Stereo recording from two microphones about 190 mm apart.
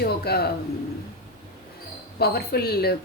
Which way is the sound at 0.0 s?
55° left (ahead or behind).